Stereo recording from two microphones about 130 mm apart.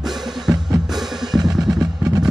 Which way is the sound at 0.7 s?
Centre (ahead or behind).